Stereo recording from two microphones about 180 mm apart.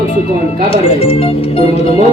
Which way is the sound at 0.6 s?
30° left (ahead or behind).